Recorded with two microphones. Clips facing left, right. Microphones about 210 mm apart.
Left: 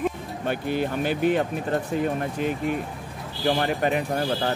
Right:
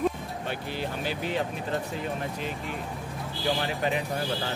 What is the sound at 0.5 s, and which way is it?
Speech, 55° left (ahead or behind).